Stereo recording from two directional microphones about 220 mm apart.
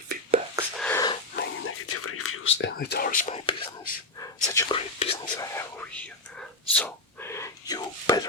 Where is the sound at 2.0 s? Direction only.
75° left (ahead or behind).